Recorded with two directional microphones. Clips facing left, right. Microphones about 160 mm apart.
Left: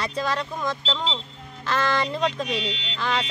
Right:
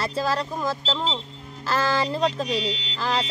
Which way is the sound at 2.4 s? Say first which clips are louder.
Right 2 dB; 35° right (ahead or behind).